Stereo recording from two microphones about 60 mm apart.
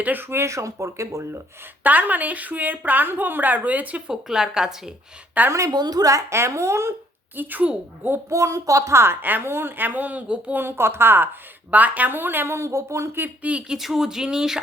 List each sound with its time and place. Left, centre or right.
0.0 s speech: right
1.8 s a woman's voice: right
4.1 s a woman's voice: centre
5.5 s a woman's voice: right
6.3 s speech: right
7.3 s speech: right
8.3 s a woman's voice: right; by 10.5 s centre
10.5 s speech: right
12.5 s speech: right
13.1 s speech: right
13.5 s a woman's voice: right
13.7 s a woman's voice: centre